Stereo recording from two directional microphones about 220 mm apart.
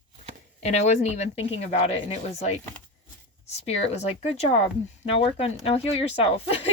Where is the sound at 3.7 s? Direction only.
30° left (ahead or behind).